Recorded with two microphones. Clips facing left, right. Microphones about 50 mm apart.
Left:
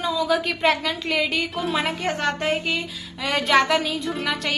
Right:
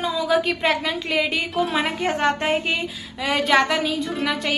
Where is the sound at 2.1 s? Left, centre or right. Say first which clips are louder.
Right 4 dB; right.